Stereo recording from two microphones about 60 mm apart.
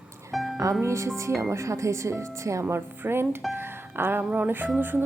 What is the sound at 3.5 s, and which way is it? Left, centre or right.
Music, right.